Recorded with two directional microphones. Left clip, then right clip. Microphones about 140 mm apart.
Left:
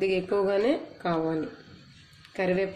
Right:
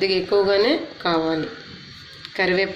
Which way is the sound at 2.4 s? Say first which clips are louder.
Right 7 dB; 55° left (ahead or behind).